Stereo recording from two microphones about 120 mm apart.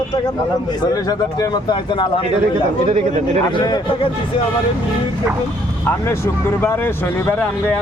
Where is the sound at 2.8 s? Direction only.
85° right.